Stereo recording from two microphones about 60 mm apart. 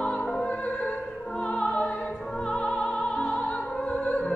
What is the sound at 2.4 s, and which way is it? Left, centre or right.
Opera, centre.